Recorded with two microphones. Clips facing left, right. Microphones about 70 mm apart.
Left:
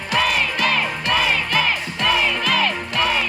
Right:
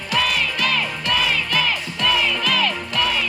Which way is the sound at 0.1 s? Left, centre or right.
Left.